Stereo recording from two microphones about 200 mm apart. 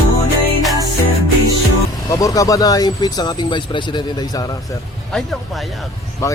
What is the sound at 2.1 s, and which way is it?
Speech, 15° left (ahead or behind).